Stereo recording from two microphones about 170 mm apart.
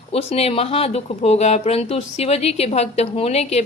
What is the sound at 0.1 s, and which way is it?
Speech, 35° left (ahead or behind).